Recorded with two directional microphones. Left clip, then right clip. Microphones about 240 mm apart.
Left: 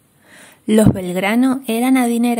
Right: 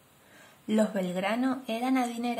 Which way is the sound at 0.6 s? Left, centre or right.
Left.